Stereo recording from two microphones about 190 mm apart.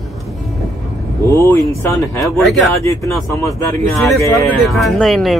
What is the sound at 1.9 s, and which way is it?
Speech, 15° left (ahead or behind).